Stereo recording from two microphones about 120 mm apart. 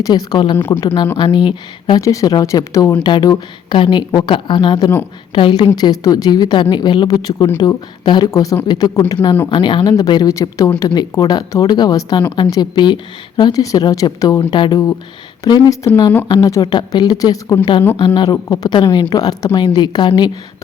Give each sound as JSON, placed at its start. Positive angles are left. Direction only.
{"t": 0.0, "sound": "speech", "side_deg": 35}
{"t": 0.5, "sound": "speech", "side_deg": 20}
{"t": 1.1, "sound": "speech", "side_deg": 40}
{"t": 2.0, "sound": "speech", "side_deg": 25}
{"t": 3.1, "sound": "a woman's voice", "side_deg": 40}
{"t": 8.3, "sound": "speech", "side_deg": 25}
{"t": 10.1, "sound": "speech", "side_deg": 30}
{"t": 17.9, "sound": "speech", "side_deg": 40}